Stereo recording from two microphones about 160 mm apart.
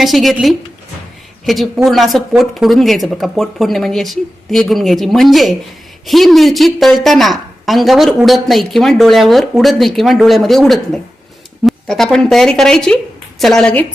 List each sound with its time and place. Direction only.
0.0 s a woman's voice: centre (ahead or behind)